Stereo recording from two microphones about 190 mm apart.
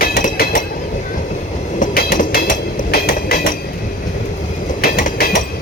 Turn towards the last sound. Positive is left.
turn(degrees=50)  # may be behind; listen again after turning